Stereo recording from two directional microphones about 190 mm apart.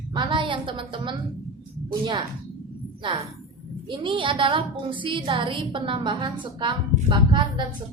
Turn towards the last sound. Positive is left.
turn(degrees=-25)  # may be behind; listen again after turning